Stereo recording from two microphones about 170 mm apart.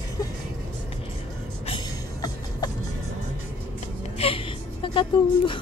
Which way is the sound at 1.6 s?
25° left (ahead or behind).